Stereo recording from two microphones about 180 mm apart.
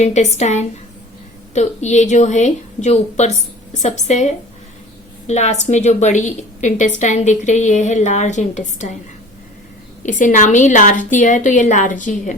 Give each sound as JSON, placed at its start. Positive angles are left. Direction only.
{"t": 0.0, "sound": "a woman's voice", "side_deg": 40}
{"t": 5.3, "sound": "a woman's voice", "side_deg": 40}
{"t": 10.0, "sound": "a woman's voice", "side_deg": 45}